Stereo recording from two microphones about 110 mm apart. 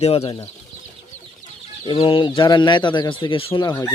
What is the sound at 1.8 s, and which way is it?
Speech, 45° left (ahead or behind).